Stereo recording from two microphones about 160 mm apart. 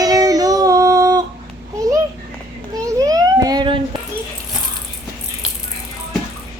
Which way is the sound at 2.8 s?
20° right (ahead or behind).